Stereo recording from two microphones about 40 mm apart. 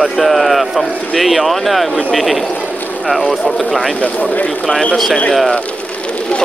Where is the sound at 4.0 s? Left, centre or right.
Left.